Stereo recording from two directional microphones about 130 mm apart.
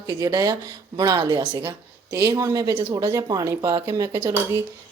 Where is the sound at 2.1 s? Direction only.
25° right (ahead or behind).